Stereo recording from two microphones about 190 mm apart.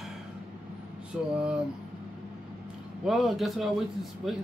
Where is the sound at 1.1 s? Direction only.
5° right (ahead or behind).